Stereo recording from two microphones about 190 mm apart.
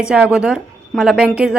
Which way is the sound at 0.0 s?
5° right (ahead or behind).